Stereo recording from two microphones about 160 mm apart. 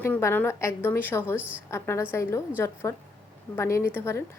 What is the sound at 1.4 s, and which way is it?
Speech, 10° right (ahead or behind).